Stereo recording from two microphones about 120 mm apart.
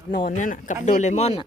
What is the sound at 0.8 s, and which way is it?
Speech, 85° left.